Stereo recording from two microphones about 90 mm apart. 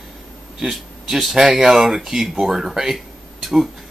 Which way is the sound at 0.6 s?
5° right (ahead or behind).